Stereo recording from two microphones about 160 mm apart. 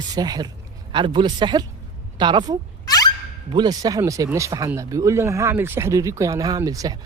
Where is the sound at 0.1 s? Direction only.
25° right (ahead or behind).